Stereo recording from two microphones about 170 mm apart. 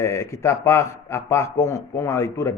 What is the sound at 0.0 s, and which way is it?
A man's voice, 15° left (ahead or behind).